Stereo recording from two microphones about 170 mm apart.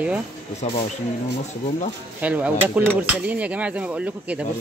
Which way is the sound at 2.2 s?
10° right (ahead or behind).